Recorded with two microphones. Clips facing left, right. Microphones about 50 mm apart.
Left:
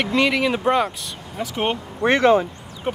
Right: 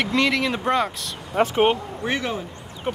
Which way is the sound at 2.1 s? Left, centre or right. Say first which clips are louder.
Left 11 dB; left.